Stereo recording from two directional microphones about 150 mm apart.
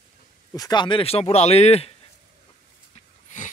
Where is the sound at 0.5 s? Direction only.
25° left (ahead or behind); by 1.9 s 45° left (ahead or behind).